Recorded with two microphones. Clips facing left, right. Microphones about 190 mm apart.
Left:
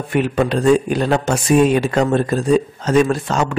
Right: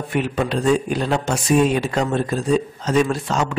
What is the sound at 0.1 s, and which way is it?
A man's voice, 55° left (ahead or behind).